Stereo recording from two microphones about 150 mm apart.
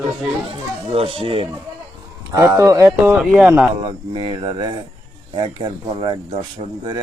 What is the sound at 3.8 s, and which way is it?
Speech, 35° right (ahead or behind).